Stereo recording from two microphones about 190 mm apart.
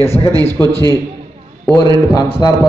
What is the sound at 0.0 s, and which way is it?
Speech, 15° left (ahead or behind).